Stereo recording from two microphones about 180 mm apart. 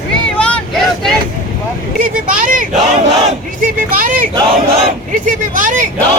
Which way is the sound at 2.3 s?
45° right (ahead or behind).